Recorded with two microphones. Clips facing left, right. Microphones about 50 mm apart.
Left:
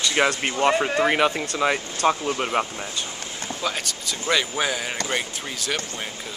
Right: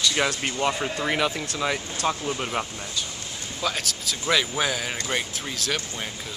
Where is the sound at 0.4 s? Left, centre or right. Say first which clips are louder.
Left 3 dB; left.